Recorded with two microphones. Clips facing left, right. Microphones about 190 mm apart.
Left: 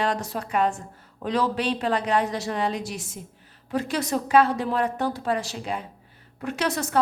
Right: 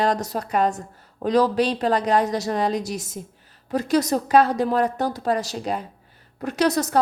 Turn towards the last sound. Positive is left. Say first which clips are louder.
# right 5 dB
turn(degrees=-40)  # may be behind; listen again after turning